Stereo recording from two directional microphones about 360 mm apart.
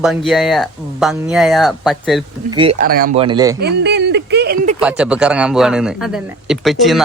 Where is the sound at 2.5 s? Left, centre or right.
Centre.